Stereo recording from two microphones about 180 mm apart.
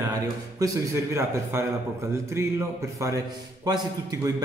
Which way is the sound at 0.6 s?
15° right (ahead or behind).